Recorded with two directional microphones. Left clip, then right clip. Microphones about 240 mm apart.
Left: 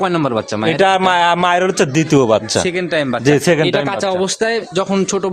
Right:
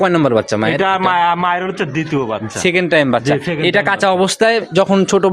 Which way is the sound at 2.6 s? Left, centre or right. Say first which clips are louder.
Right 3 dB; centre.